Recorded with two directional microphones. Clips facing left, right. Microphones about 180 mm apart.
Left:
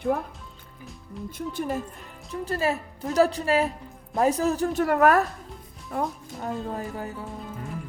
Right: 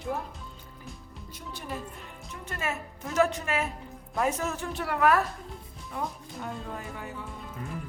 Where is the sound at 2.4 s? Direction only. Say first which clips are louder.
Left 8 dB; 35° left (ahead or behind).